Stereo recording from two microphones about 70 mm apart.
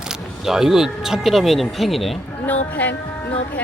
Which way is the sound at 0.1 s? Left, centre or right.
Centre.